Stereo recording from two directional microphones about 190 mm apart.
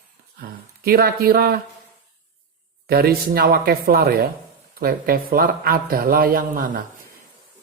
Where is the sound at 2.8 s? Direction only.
55° right (ahead or behind).